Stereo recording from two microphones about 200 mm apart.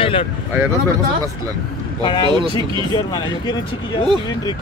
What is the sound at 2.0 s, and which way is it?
Speech, 25° left (ahead or behind).